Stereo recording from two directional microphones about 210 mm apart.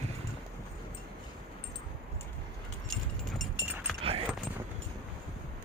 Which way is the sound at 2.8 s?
Centre (ahead or behind).